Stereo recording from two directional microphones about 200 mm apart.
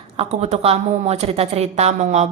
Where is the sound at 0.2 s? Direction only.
30° right (ahead or behind).